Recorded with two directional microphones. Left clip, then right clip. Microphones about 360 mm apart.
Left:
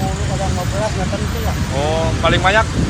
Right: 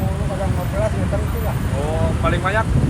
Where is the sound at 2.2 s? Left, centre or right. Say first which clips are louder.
Left 7 dB; centre.